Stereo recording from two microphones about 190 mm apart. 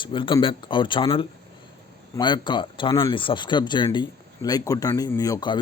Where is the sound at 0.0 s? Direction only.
25° left (ahead or behind).